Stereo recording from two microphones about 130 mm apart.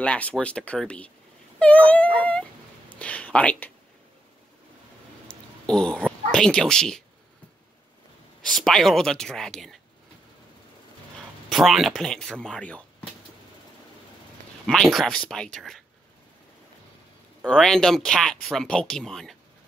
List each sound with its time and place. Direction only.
0.0 s speech: 10° left (ahead or behind)
2.9 s a sound: 10° left (ahead or behind)
5.3 s speech: 5° left (ahead or behind)
8.4 s speech: centre (ahead or behind)
11.4 s speech: centre (ahead or behind)
14.7 s speech: centre (ahead or behind)
17.4 s speech: centre (ahead or behind)